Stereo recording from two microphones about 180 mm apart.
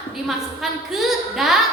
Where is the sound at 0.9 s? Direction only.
Centre (ahead or behind).